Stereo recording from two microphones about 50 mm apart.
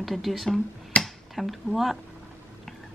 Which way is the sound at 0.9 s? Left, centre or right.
Left.